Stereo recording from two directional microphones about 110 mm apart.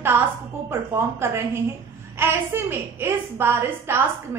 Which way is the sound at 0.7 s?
20° right (ahead or behind).